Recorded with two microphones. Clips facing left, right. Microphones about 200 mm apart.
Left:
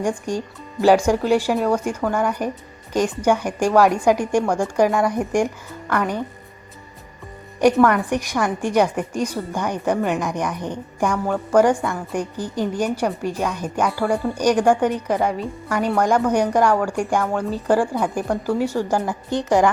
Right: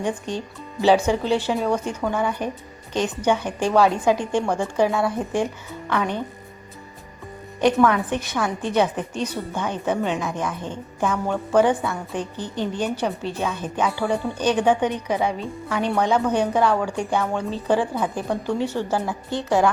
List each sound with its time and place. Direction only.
0.3 s a woman's voice: 10° left (ahead or behind)
7.9 s a woman's voice: 10° left (ahead or behind)
11.8 s speech: centre (ahead or behind)
12.1 s a woman's voice: 10° left (ahead or behind)
13.8 s a woman's voice: centre (ahead or behind); by 19.7 s 15° left (ahead or behind)